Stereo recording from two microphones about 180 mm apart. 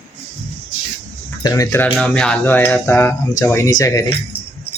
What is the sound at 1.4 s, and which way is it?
Speech, 20° left (ahead or behind).